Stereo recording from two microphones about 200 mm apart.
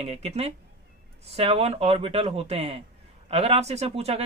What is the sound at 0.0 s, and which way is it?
Speech, 30° right (ahead or behind).